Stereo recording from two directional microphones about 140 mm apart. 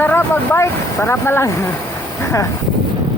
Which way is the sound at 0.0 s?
15° left (ahead or behind).